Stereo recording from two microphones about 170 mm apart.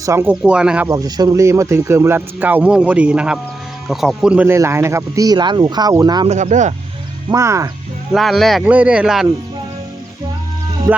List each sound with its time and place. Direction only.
0.0 s speech: 15° right (ahead or behind)
0.9 s speech: 20° right (ahead or behind)
6.2 s speech: 45° right (ahead or behind)
7.3 s speech: 20° right (ahead or behind)
8.1 s speech: centre (ahead or behind)
10.9 s music: 15° right (ahead or behind)